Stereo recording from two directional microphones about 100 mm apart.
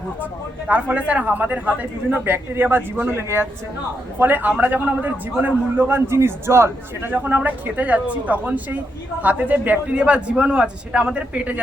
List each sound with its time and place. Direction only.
0.7 s a man's voice: 15° right (ahead or behind)